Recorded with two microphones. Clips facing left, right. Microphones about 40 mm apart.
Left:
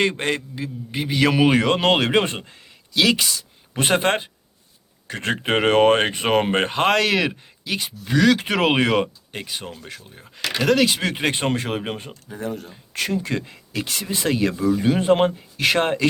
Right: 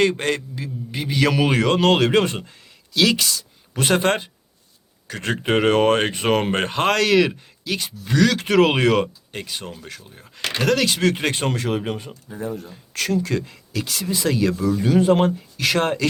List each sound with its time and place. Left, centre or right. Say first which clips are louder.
0.0 s speech: right 2 dB; centre
6.0 s speech: even; centre
12.3 s speech: even; left
12.9 s speech: right 2 dB; centre
13.8 s speech: right 1 dB; left
14.5 s speech: left 1 dB; centre
14.8 s speech: right 2 dB; left